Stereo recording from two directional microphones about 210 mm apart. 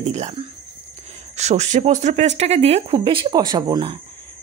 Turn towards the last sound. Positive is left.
turn(degrees=-20)  # may be behind; listen again after turning